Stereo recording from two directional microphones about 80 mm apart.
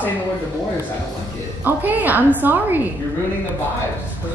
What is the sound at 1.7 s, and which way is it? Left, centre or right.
A woman's voice, right.